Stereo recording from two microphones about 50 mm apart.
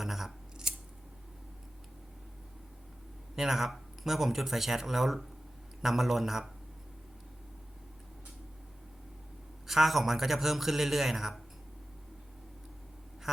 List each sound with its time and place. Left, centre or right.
0.0 s scissors: centre
0.7 s scissors: centre
3.3 s speech: centre
9.6 s speech: centre
13.3 s duck: centre